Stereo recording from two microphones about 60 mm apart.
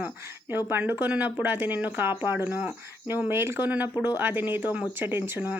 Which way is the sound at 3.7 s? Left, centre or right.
Right.